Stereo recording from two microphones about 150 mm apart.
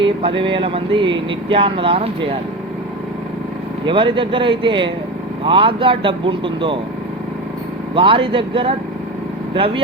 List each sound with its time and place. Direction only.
0.0 s speech: 35° right (ahead or behind)
3.8 s speech: 35° right (ahead or behind)
7.9 s speech: 35° right (ahead or behind)